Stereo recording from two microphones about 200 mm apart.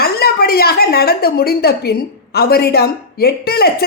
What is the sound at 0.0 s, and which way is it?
A woman's voice, 50° left (ahead or behind).